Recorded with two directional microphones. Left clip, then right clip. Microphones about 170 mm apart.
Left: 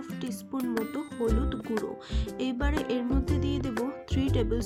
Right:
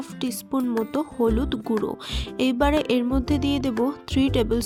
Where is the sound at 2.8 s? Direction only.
40° right (ahead or behind).